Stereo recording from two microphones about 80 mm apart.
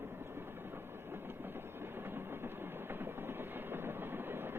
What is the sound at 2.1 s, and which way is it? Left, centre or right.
Train, right.